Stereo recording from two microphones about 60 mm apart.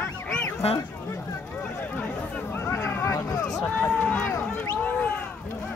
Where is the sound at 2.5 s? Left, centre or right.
Left.